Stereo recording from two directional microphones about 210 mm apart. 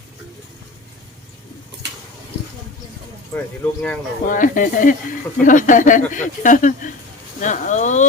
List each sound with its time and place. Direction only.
3.3 s speech: 5° left (ahead or behind)
4.3 s speech: 40° left (ahead or behind)